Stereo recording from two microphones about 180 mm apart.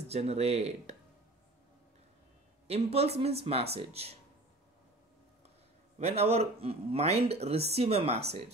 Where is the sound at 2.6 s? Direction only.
35° right (ahead or behind).